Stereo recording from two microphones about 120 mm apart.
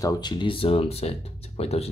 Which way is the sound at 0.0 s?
40° left (ahead or behind).